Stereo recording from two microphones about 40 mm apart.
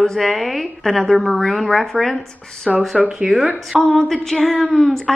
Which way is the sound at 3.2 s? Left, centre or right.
Centre.